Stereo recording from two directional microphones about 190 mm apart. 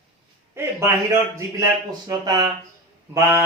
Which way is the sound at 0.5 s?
15° right (ahead or behind).